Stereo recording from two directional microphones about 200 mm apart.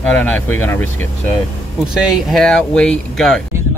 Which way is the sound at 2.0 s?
Centre (ahead or behind).